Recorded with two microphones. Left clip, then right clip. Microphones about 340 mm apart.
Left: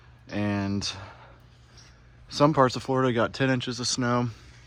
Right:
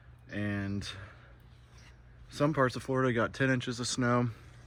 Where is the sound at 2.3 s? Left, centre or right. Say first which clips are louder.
Left 8 dB; centre.